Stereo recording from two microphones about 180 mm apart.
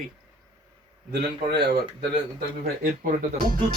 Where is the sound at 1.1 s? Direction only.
65° right (ahead or behind).